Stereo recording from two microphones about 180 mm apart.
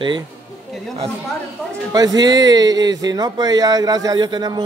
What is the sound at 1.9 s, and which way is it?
Speech, 20° right (ahead or behind).